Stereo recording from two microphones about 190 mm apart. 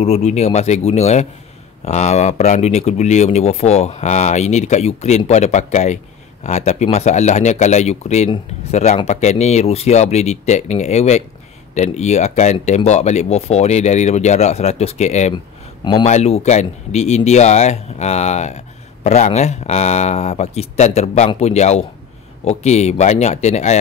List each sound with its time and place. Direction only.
0.0 s speech: 35° left (ahead or behind)
15.3 s speech: 25° left (ahead or behind)